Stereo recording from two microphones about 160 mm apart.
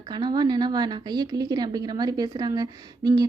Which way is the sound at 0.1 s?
25° right (ahead or behind).